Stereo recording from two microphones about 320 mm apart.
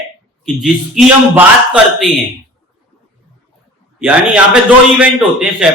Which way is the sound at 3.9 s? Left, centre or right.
Centre.